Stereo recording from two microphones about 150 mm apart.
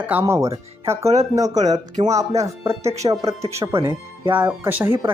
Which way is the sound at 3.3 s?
45° right (ahead or behind).